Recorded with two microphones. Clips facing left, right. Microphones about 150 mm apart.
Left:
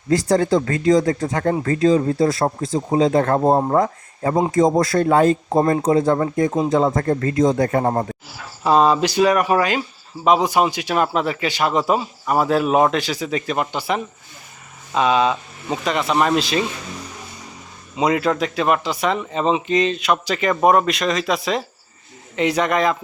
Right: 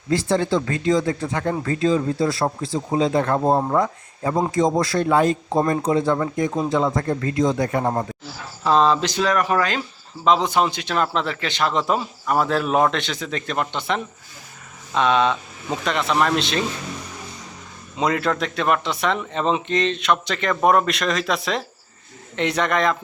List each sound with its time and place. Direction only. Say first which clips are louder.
0.1 s a man's voice: left 3 dB; 40° left (ahead or behind)
3.3 s speech: left 3 dB; 30° left (ahead or behind)
3.8 s a man's voice: left 3 dB; 45° left (ahead or behind)
5.5 s speech: left 2 dB; 30° left (ahead or behind)
5.8 s a man's voice: left 3 dB; 45° left (ahead or behind)
8.6 s a man's voice: left 2 dB; 10° left (ahead or behind)
17.9 s a man's voice: left 3 dB; 5° left (ahead or behind)